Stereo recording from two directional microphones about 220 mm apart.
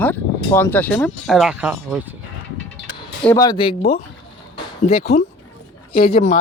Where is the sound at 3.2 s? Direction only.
10° left (ahead or behind); by 4.0 s 25° left (ahead or behind).